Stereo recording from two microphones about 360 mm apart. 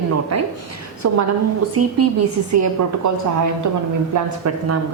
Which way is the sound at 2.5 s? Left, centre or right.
Right.